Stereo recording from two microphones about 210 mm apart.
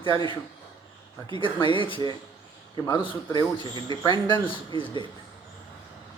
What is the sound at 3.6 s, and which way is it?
Speech, 25° right (ahead or behind).